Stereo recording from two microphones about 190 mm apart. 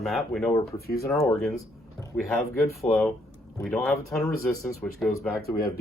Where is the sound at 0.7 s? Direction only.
55° left (ahead or behind).